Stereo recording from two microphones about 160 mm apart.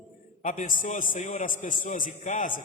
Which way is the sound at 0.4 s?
50° left (ahead or behind).